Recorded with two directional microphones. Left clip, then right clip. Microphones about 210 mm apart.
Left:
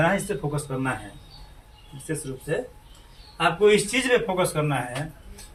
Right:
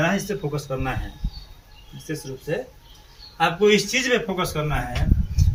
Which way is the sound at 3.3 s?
20° left (ahead or behind).